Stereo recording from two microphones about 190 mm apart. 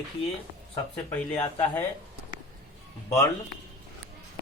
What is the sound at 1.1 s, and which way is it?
Speech, 10° left (ahead or behind).